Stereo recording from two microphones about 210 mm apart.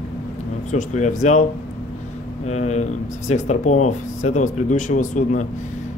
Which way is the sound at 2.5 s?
30° left (ahead or behind).